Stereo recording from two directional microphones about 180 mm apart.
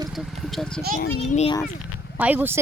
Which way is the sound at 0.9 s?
40° left (ahead or behind).